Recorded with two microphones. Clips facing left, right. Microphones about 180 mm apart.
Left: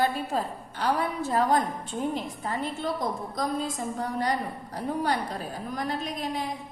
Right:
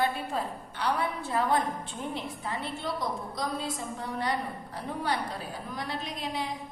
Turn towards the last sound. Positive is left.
turn(degrees=45)  # may be behind; listen again after turning